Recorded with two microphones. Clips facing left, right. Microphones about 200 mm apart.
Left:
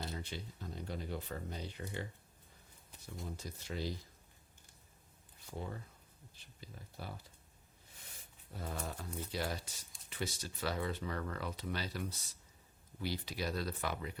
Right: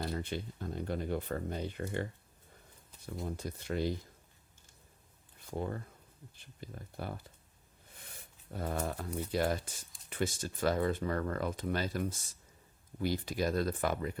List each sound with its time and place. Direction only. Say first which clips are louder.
0.0 s speech: right 7 dB; 55° right (ahead or behind)
3.2 s speech: right 7 dB; 55° right (ahead or behind)
5.5 s speech: right 7 dB; 55° right (ahead or behind)
8.4 s speech: right 7 dB; 55° right (ahead or behind)